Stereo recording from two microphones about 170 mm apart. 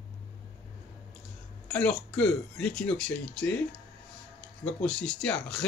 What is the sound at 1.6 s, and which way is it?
Speech, 5° left (ahead or behind).